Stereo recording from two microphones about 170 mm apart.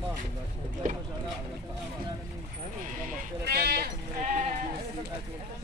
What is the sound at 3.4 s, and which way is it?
Sheep, 65° right (ahead or behind).